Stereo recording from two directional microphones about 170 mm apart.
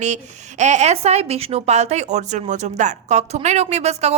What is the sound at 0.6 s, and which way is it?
Speech, 45° right (ahead or behind).